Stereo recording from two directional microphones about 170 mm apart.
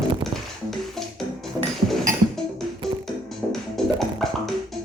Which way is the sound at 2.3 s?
Centre (ahead or behind).